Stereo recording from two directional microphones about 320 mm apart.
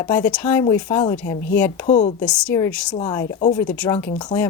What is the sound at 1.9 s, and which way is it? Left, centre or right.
Speech, left.